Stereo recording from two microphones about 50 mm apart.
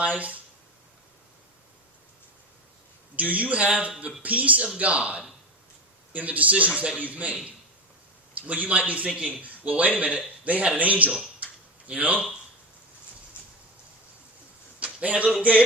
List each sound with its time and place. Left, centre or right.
0.0 s speech: right
3.2 s speech: right
8.4 s a man's voice: right
15.0 s speech: right